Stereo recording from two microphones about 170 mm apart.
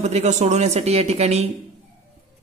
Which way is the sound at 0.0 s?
40° right (ahead or behind).